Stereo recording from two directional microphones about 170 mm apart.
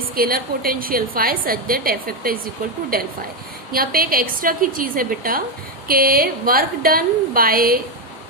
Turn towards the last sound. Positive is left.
turn(degrees=-60)  # may be behind; listen again after turning